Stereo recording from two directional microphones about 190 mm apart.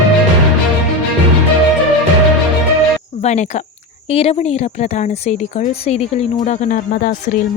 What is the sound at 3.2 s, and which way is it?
Speech, 35° left (ahead or behind).